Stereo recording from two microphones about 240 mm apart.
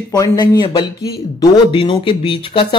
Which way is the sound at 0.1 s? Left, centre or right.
Centre.